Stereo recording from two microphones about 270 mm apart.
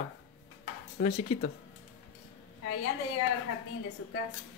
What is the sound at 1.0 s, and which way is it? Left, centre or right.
Speech, left.